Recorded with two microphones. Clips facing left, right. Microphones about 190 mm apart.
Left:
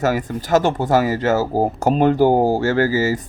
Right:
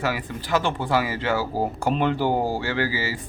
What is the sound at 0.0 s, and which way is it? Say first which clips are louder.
Speech: left 7 dB; 45° left (ahead or behind).